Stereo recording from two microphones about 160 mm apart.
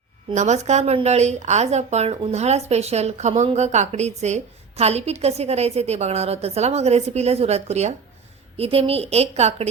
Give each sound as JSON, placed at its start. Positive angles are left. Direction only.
{"t": 0.3, "sound": "a woman's voice", "side_deg": -45}